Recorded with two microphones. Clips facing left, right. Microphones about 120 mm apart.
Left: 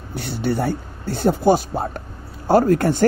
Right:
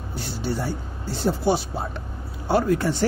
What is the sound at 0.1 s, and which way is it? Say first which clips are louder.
Speech: left 6 dB; 60° left (ahead or behind).